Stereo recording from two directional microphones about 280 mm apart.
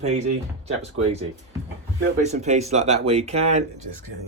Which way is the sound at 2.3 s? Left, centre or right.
Right.